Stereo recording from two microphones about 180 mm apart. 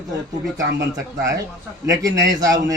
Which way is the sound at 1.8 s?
20° right (ahead or behind).